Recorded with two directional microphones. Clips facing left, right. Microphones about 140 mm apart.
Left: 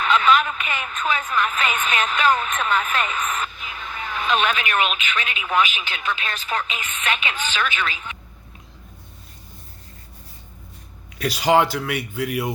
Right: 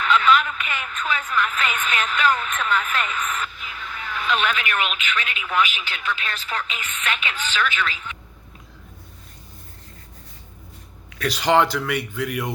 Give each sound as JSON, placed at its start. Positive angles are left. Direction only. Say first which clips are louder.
{"t": 0.0, "sound": "a woman's voice", "louder": "left 1 dB", "side_deg": 20}
{"t": 11.2, "sound": "speech", "louder": "left 1 dB", "side_deg": 10}